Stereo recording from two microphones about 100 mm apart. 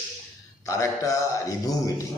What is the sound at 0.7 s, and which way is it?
A man's voice, 30° left (ahead or behind).